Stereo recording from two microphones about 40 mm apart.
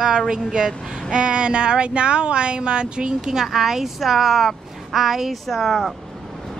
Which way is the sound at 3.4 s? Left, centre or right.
Centre.